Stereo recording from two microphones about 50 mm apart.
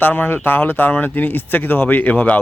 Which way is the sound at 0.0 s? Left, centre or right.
Left.